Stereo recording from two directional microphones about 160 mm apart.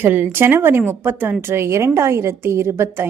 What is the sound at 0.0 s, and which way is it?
A woman's voice, 10° right (ahead or behind).